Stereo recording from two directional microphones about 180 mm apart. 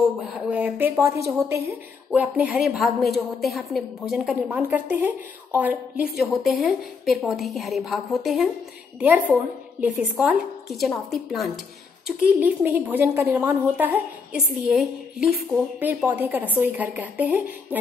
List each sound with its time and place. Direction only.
0.3 s a woman's voice: 10° right (ahead or behind)
12.2 s a woman's voice: 10° right (ahead or behind)